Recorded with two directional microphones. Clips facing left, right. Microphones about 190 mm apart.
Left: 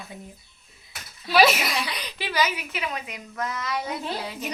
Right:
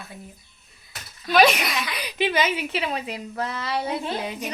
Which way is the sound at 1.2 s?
5° left (ahead or behind).